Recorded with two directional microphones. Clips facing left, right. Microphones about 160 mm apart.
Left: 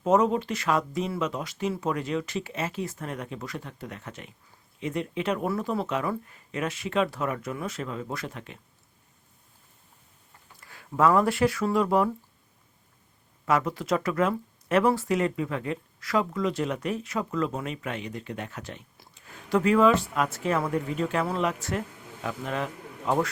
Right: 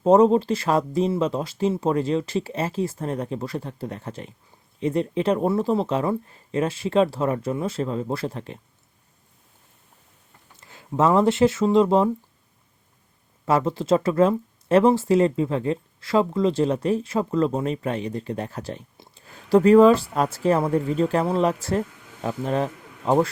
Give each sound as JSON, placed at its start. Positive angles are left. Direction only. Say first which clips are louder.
{"t": 0.0, "sound": "speech", "louder": "right 7 dB", "side_deg": -30}
{"t": 10.6, "sound": "speech", "louder": "right 2 dB", "side_deg": -25}
{"t": 13.4, "sound": "speech", "louder": "right 4 dB", "side_deg": -30}